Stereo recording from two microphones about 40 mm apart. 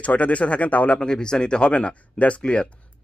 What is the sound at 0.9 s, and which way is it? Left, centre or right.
Speech, centre.